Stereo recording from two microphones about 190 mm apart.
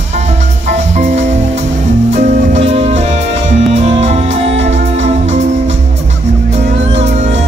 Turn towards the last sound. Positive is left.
turn(degrees=-35)  # may be behind; listen again after turning